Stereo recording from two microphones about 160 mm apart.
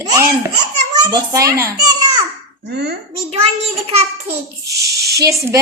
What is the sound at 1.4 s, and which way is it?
Speech, 20° right (ahead or behind).